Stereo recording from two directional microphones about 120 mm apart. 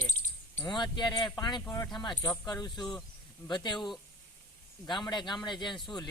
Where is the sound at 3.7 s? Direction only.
Centre (ahead or behind).